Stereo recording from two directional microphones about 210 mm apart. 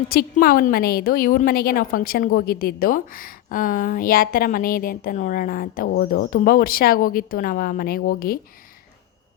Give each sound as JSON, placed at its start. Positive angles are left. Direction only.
{"t": 0.1, "sound": "a woman's voice", "side_deg": 45}